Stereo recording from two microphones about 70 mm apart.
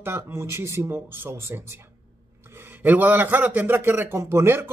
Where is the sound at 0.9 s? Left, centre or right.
Right.